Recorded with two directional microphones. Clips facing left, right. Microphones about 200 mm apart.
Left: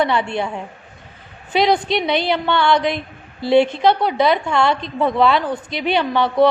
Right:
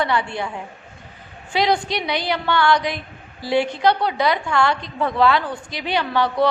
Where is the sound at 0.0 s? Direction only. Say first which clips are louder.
Left 3 dB; 20° left (ahead or behind).